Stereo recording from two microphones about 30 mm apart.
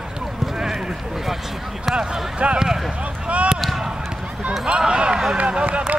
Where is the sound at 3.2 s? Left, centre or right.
Right.